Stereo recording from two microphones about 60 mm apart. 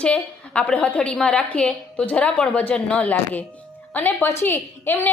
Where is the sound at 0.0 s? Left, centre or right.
Centre.